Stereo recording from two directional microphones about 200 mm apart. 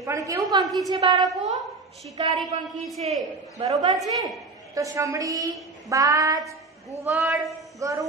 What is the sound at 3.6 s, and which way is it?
Speech, 30° right (ahead or behind).